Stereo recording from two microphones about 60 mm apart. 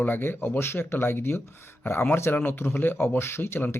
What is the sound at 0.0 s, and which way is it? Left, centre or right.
Speech, left.